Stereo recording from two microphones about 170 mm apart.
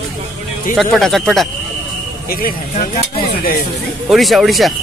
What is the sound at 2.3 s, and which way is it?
Speech, 60° left (ahead or behind).